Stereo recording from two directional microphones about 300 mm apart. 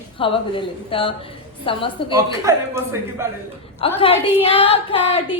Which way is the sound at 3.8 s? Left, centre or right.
Centre.